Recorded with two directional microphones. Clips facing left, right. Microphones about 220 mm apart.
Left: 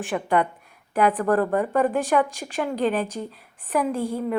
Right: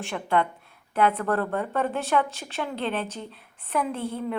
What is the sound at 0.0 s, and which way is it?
A woman's voice, 15° left (ahead or behind).